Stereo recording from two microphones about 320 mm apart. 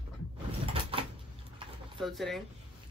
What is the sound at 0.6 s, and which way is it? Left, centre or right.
Cupboard open or close, centre.